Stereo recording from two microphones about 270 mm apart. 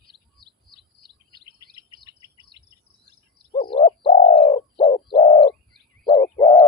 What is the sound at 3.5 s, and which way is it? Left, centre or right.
Bird, left.